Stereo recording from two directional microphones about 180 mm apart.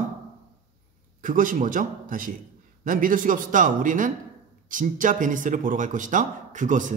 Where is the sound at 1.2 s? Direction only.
45° right (ahead or behind).